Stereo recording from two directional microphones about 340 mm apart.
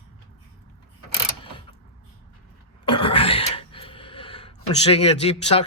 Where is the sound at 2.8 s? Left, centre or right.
Centre.